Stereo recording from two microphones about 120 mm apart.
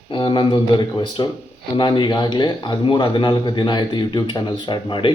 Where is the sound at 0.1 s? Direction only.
45° left (ahead or behind).